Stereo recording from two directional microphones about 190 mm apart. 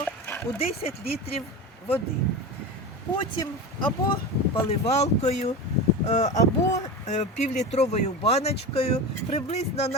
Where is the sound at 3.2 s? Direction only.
25° left (ahead or behind).